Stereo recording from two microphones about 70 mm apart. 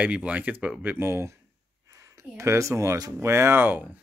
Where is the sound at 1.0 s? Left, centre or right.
Right.